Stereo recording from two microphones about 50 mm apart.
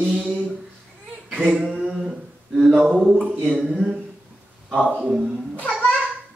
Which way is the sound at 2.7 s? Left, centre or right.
Centre.